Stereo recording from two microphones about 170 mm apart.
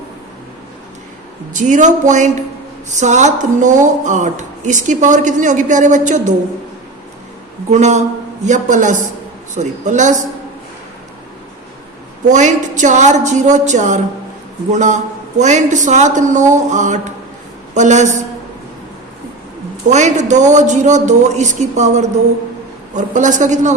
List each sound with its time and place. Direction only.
1.5 s a woman's voice: 45° right (ahead or behind)
7.7 s a woman's voice: 45° right (ahead or behind)
12.3 s a woman's voice: 45° right (ahead or behind)
19.9 s a woman's voice: 45° right (ahead or behind)